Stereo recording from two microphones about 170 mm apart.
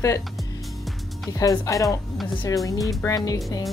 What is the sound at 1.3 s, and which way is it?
A woman's voice, 20° left (ahead or behind).